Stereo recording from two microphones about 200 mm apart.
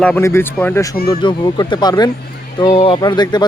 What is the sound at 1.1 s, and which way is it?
Speech, 25° left (ahead or behind).